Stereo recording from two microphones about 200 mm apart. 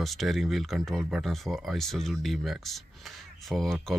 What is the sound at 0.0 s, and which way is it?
Speech, centre (ahead or behind).